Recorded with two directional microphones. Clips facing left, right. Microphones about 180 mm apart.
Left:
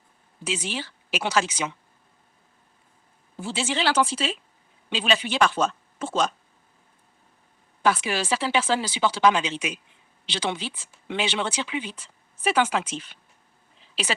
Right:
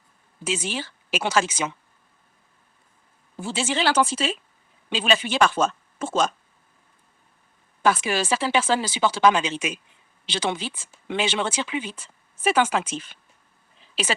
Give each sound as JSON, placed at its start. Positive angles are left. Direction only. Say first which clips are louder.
{"t": 0.4, "sound": "speech", "louder": "right 2 dB", "side_deg": -45}
{"t": 3.4, "sound": "speech", "louder": "right 2 dB", "side_deg": -45}
{"t": 7.8, "sound": "speech", "louder": "right 2 dB", "side_deg": -45}